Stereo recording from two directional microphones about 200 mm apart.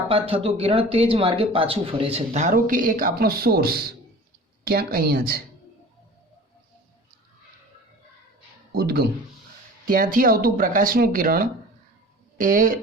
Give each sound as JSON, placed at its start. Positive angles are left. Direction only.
{"t": 0.1, "sound": "speech", "side_deg": -30}
{"t": 8.7, "sound": "speech", "side_deg": -50}